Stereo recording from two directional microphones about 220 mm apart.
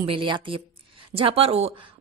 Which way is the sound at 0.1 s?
20° right (ahead or behind).